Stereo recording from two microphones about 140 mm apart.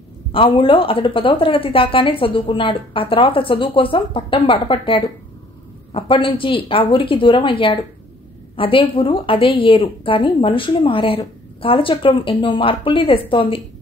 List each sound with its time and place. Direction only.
0.3 s a woman's voice: 40° left (ahead or behind)